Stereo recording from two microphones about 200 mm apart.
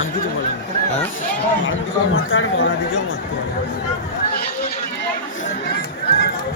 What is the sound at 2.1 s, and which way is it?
Speech, 75° left (ahead or behind).